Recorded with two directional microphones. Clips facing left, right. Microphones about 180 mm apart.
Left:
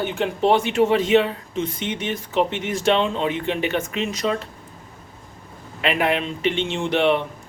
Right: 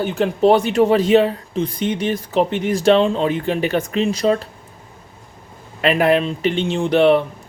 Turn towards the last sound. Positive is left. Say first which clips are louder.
# right 6 dB
turn(degrees=-40)  # may be behind; listen again after turning